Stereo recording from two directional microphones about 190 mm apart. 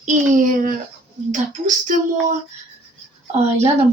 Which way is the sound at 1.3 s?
40° right (ahead or behind).